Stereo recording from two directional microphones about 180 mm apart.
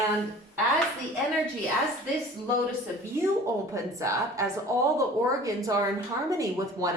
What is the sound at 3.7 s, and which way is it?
A woman's voice, 15° right (ahead or behind).